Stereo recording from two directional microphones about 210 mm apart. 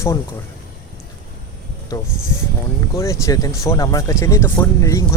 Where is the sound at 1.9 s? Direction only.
15° left (ahead or behind).